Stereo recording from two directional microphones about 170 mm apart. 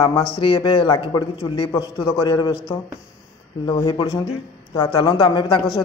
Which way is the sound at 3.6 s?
35° left (ahead or behind).